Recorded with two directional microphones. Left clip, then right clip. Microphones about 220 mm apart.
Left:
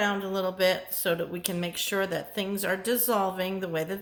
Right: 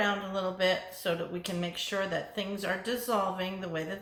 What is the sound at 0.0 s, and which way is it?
Speech, 50° left (ahead or behind).